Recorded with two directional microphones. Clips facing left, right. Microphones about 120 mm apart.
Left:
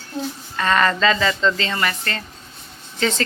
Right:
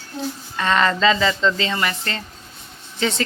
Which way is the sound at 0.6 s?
15° right (ahead or behind).